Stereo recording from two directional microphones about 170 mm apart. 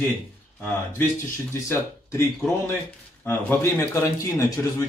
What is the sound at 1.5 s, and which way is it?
A man's voice, 15° left (ahead or behind).